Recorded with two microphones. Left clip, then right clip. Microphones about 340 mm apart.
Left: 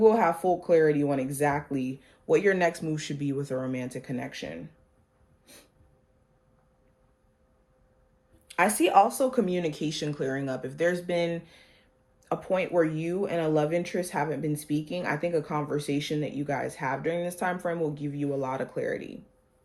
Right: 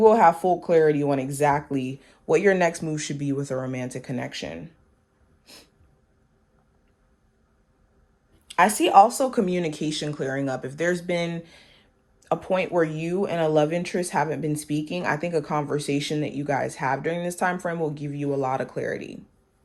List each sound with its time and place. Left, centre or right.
0.0 s speech: right
8.4 s speech: right